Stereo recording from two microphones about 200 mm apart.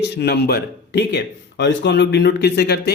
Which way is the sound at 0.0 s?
55° left (ahead or behind).